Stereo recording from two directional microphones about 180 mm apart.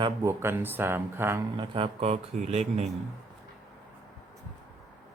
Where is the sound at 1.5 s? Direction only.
30° right (ahead or behind).